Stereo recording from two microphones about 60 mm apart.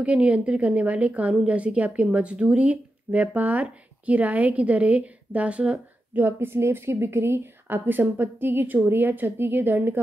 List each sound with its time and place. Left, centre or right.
0.0 s speech: right
6.1 s speech: right